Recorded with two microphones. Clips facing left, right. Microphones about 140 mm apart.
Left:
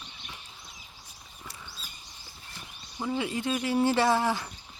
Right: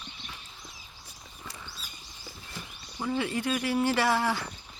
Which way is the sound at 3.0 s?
15° left (ahead or behind).